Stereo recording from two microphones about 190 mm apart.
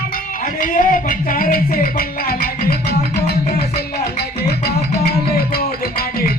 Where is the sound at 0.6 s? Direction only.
45° left (ahead or behind).